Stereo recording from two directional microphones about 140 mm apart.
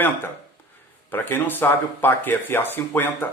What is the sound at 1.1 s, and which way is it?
Speech, 15° left (ahead or behind).